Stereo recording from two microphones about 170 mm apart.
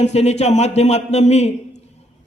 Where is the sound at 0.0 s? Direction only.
40° left (ahead or behind).